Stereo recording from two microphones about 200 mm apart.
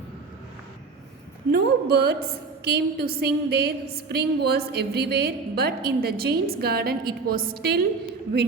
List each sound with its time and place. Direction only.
1.5 s a woman's voice: 50° right (ahead or behind)